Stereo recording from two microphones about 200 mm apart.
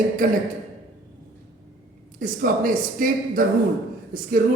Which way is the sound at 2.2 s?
45° right (ahead or behind).